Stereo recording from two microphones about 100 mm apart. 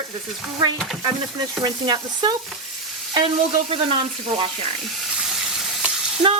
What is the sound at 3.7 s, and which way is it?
Frying, 65° right (ahead or behind).